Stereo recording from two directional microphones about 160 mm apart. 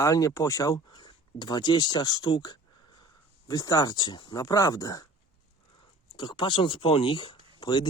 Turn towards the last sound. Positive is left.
turn(degrees=30)  # may be behind; listen again after turning